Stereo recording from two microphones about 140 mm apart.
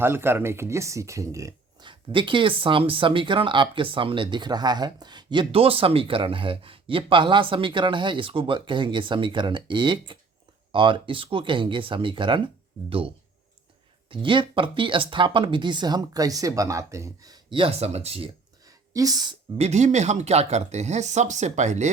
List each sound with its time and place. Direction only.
0.0 s speech: 15° right (ahead or behind)
1.9 s speech: 35° right (ahead or behind)
18.6 s a sound: 25° right (ahead or behind)
19.5 s speech: 50° right (ahead or behind)